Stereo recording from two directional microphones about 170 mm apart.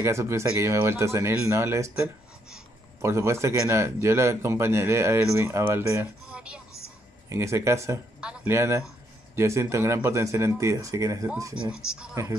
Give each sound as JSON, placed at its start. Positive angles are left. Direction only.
{"t": 0.0, "sound": "speech", "side_deg": -15}
{"t": 3.0, "sound": "speech", "side_deg": -15}
{"t": 6.3, "sound": "music", "side_deg": -5}
{"t": 7.2, "sound": "speech", "side_deg": -15}
{"t": 11.7, "sound": "speech", "side_deg": -5}